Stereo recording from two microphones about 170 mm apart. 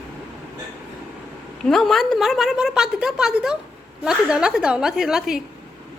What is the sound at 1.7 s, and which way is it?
A woman's voice, centre (ahead or behind).